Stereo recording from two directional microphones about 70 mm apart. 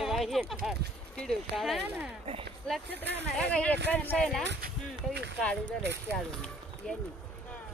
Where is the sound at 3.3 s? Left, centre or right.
Centre.